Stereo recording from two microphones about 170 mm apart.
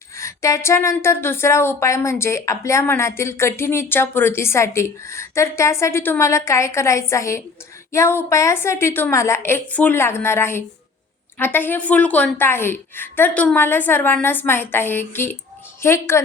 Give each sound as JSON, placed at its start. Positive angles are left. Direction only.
{"t": 0.2, "sound": "a woman's voice", "side_deg": 15}